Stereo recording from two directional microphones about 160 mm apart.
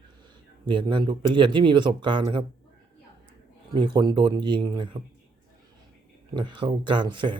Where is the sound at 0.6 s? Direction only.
30° right (ahead or behind).